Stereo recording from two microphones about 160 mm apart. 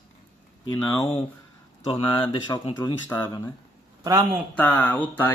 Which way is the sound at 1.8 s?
35° left (ahead or behind).